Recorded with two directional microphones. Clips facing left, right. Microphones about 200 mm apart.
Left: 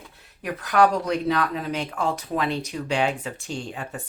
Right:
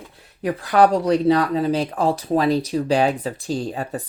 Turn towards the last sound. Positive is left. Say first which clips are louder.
# right 7 dB
turn(degrees=-35)  # may be behind; listen again after turning